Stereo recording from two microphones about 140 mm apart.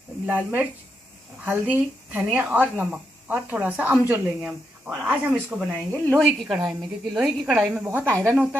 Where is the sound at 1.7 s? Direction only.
15° right (ahead or behind).